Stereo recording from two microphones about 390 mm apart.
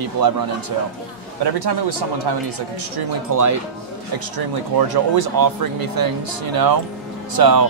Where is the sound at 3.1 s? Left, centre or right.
Right.